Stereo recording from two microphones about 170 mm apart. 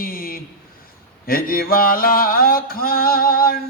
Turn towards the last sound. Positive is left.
turn(degrees=60)  # may be behind; listen again after turning